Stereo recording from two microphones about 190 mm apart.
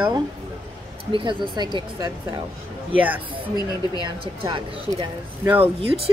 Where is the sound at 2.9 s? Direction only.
10° right (ahead or behind).